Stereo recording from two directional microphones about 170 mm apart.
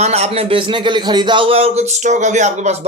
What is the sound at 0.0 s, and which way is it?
A man's voice, 40° right (ahead or behind).